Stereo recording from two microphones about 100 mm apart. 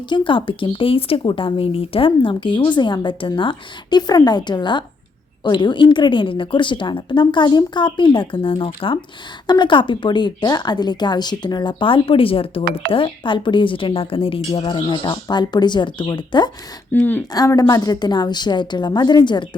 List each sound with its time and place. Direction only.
0.1 s speech: 60° left (ahead or behind)
1.2 s speech: 50° left (ahead or behind)
14.6 s speech: 50° left (ahead or behind)
16.9 s speech: 20° left (ahead or behind)
17.3 s speech: 40° left (ahead or behind)